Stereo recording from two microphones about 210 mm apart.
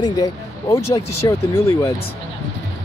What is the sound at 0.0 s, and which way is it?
Speech, 15° left (ahead or behind).